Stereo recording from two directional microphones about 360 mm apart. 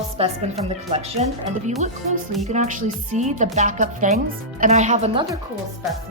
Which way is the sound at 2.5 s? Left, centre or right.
Centre.